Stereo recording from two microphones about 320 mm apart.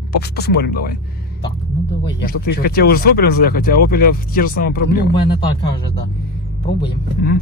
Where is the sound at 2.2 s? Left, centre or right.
Left.